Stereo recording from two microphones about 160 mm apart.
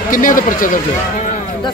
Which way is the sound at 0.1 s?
60° left (ahead or behind).